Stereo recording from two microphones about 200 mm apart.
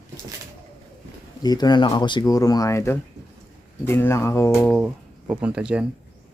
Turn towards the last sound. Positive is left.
turn(degrees=-5)  # may be behind; listen again after turning